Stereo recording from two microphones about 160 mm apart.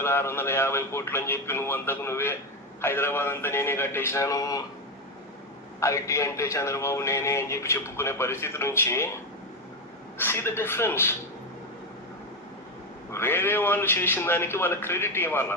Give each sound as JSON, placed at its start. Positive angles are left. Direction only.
{"t": 0.0, "sound": "a man's voice", "side_deg": 15}
{"t": 5.8, "sound": "a man's voice", "side_deg": 20}
{"t": 10.2, "sound": "a man's voice", "side_deg": 15}
{"t": 13.1, "sound": "a man's voice", "side_deg": 15}